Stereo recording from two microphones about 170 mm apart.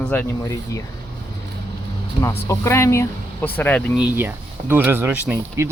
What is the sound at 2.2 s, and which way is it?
Speech, 15° left (ahead or behind).